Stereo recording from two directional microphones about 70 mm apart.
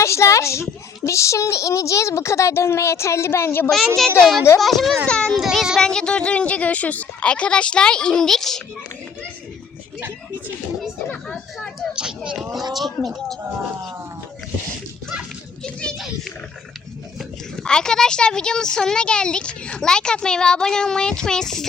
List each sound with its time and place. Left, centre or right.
0.0 s speech: left
3.7 s speech: centre
5.0 s speech: centre
5.3 s speech: centre
5.8 s speech: centre
11.9 s speech: centre
15.6 s children playing: centre
17.2 s speech: centre